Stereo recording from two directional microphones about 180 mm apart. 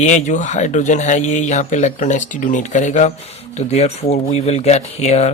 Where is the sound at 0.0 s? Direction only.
40° left (ahead or behind).